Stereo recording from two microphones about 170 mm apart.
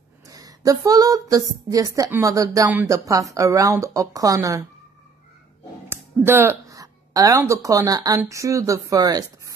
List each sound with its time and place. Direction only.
0.3 s speech: 20° right (ahead or behind)
5.9 s a woman's voice: 15° right (ahead or behind)